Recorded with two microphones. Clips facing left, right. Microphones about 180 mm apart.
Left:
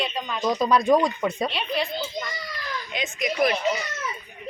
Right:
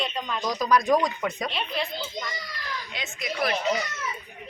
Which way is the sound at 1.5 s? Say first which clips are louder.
Left 3 dB; centre (ahead or behind).